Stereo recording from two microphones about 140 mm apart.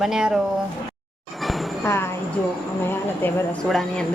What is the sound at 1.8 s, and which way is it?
Speech, 20° left (ahead or behind).